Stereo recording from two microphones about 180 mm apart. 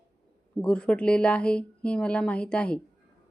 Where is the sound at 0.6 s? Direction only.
5° left (ahead or behind).